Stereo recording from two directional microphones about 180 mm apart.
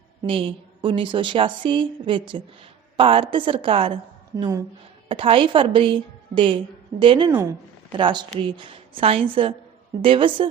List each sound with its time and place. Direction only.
0.3 s a woman's voice: 30° right (ahead or behind)